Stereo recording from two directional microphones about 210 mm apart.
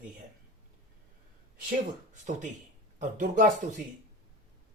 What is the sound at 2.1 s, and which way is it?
Speech, 35° right (ahead or behind).